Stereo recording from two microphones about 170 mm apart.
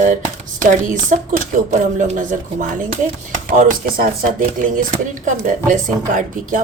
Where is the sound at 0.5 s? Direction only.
50° right (ahead or behind).